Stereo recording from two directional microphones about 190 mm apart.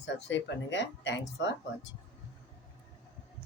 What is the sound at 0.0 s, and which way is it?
Speech, 70° left (ahead or behind).